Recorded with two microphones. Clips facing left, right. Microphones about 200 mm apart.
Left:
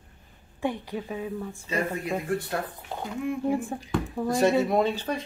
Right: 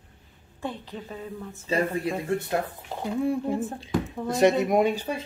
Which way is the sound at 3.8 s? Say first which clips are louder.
Right 1 dB; 20° right (ahead or behind).